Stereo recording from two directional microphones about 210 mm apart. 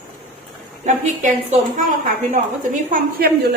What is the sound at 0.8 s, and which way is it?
Speech, 35° right (ahead or behind).